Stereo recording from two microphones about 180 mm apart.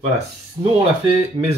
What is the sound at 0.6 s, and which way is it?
Speech, 25° right (ahead or behind).